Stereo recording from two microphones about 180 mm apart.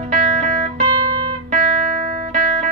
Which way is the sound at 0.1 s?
50° right (ahead or behind).